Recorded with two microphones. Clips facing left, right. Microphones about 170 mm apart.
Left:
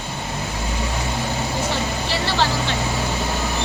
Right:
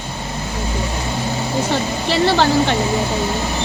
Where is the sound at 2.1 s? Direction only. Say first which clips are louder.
Right 9 dB; 60° right (ahead or behind).